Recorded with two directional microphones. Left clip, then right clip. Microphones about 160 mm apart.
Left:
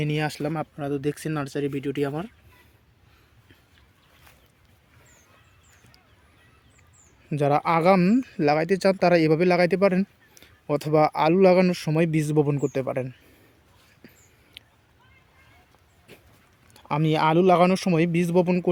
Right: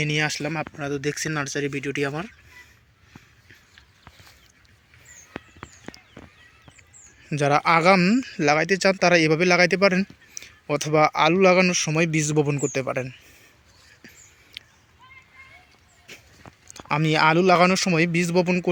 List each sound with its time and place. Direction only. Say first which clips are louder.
0.0 s speech: right 3 dB; 15° left (ahead or behind)
7.3 s speech: right 2 dB; 10° left (ahead or behind)
14.0 s a sound: right 5 dB; 10° left (ahead or behind)
16.1 s walk: right 6 dB; 15° left (ahead or behind)
16.7 s speech: right 2 dB; 10° left (ahead or behind)